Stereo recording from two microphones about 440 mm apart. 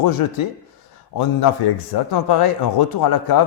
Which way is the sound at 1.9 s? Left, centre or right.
Left.